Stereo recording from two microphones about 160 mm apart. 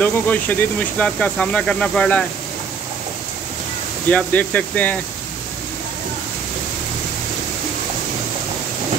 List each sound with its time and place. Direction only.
0.0 s speech: 10° left (ahead or behind)
4.1 s speech: 10° left (ahead or behind)